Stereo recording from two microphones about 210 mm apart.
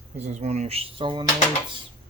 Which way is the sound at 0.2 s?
30° right (ahead or behind).